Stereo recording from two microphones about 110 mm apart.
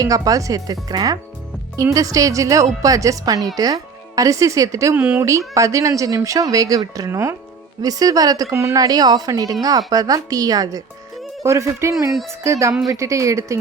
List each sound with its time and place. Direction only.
0.0 s a woman's voice: 30° right (ahead or behind)
4.9 s speech: 15° right (ahead or behind)
5.5 s a woman's voice: 30° right (ahead or behind)
7.8 s a woman's voice: 35° right (ahead or behind)